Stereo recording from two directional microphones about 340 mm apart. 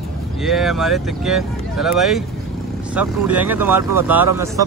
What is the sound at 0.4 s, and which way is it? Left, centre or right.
Speech, centre.